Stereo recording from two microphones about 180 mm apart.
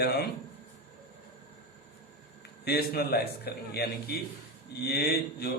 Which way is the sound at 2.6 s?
60° left (ahead or behind).